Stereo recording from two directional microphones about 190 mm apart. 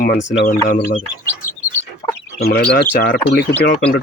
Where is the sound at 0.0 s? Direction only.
60° left (ahead or behind).